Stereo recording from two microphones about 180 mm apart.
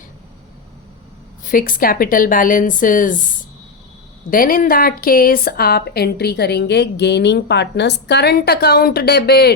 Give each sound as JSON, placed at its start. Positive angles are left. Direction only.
{"t": 1.5, "sound": "speech", "side_deg": 50}
{"t": 4.3, "sound": "a woman's voice", "side_deg": 50}